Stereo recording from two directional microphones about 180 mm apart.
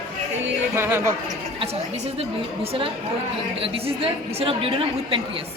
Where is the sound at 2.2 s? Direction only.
35° right (ahead or behind).